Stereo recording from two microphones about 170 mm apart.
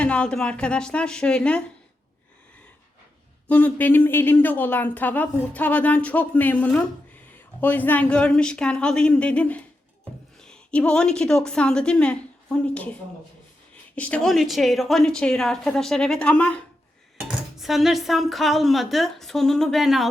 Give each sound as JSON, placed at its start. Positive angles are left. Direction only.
{"t": 0.0, "sound": "speech", "side_deg": 5}
{"t": 3.4, "sound": "a woman's voice", "side_deg": 10}
{"t": 13.9, "sound": "speech", "side_deg": 5}